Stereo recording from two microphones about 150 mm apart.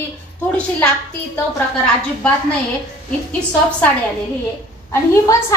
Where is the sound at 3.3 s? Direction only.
10° left (ahead or behind).